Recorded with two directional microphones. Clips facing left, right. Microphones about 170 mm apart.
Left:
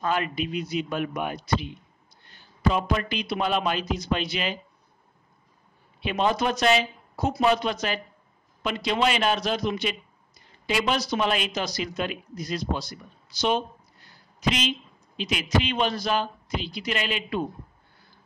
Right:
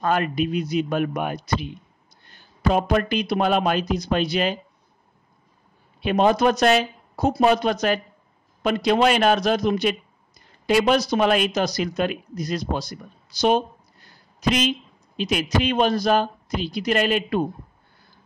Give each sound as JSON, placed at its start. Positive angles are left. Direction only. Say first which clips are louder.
{"t": 0.0, "sound": "a man's voice", "louder": "right 5 dB", "side_deg": -45}
{"t": 5.9, "sound": "a man's voice", "louder": "right 6 dB", "side_deg": -45}